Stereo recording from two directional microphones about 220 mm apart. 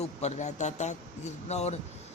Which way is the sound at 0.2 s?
30° left (ahead or behind).